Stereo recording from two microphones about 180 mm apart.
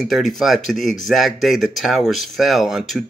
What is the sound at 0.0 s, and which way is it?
Speech, centre (ahead or behind).